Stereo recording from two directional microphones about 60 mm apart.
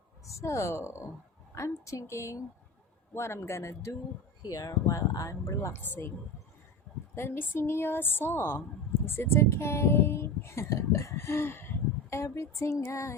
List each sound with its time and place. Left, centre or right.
0.3 s speech: left
1.5 s a sound: left
3.2 s speech: left
4.4 s speech: left
5.8 s a woman's voice: left
7.2 s a woman's voice: left
12.1 s a sound: left